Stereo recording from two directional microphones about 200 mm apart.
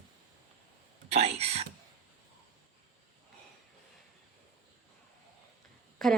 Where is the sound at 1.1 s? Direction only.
30° right (ahead or behind).